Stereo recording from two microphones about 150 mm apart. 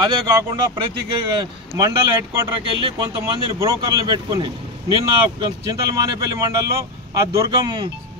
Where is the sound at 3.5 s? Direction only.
20° right (ahead or behind).